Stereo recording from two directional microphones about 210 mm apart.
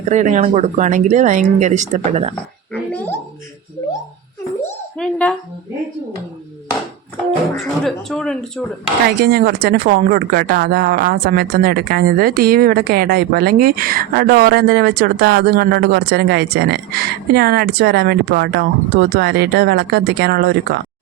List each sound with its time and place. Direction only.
0.0 s speech: 35° right (ahead or behind)
2.7 s gargling: 5° left (ahead or behind)
4.9 s speech: 5° left (ahead or behind)
7.5 s speech: centre (ahead or behind)
9.2 s speech: 45° right (ahead or behind)